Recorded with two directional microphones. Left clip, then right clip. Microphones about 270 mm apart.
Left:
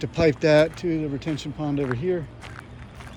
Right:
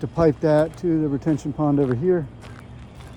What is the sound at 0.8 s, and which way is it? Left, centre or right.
Speech, centre.